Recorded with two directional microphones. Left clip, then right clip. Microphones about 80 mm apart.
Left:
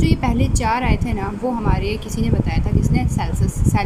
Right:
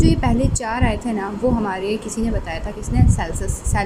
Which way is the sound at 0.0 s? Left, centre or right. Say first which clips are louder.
Right 2 dB; right.